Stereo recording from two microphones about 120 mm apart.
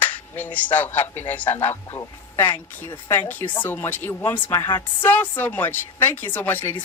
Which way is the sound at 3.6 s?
15° left (ahead or behind).